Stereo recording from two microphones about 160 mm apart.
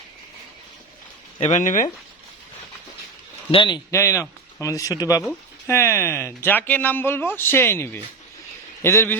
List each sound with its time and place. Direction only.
1.4 s speech: 45° left (ahead or behind)
3.5 s speech: 30° left (ahead or behind)
3.9 s speech: 20° left (ahead or behind)
5.2 s speech: 10° left (ahead or behind)